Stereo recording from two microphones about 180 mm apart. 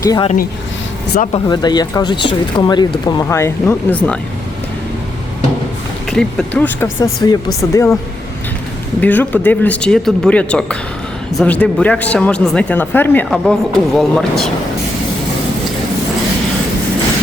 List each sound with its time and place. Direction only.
0.0 s speech: 20° left (ahead or behind)
1.3 s speech: 25° left (ahead or behind)
6.1 s speech: 5° left (ahead or behind)
9.0 s speech: 10° left (ahead or behind)